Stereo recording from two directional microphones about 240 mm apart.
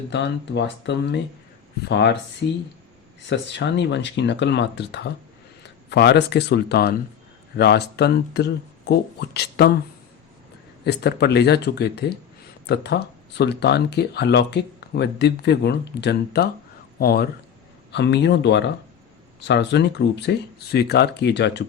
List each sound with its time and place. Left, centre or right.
0.1 s speech: left
3.2 s speech: left
10.8 s speech: left